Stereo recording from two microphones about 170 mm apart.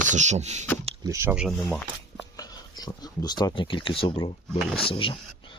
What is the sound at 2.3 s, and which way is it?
Speech, 20° left (ahead or behind).